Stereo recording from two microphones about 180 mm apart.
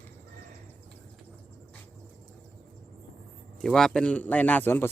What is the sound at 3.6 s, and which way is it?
A man's voice, 5° left (ahead or behind).